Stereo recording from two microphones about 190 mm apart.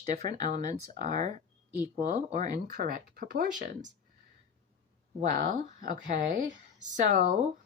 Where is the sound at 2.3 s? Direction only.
40° right (ahead or behind).